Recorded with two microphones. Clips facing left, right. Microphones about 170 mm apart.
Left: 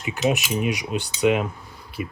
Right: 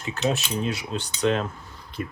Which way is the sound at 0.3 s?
15° left (ahead or behind).